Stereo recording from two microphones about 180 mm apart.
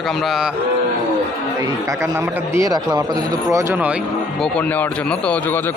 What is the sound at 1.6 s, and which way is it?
A man's voice, 15° right (ahead or behind).